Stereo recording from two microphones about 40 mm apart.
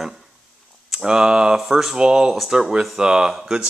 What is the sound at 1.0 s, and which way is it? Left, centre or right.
Speech, centre.